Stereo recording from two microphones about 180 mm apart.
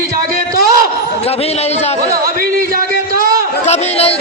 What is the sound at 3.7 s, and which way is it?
Chatter, 35° left (ahead or behind).